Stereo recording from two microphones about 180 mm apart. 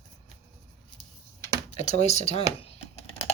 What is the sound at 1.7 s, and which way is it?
Speech, 40° left (ahead or behind).